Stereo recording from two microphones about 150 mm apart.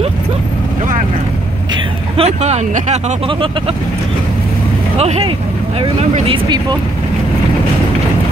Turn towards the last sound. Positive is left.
turn(degrees=-35)  # may be behind; listen again after turning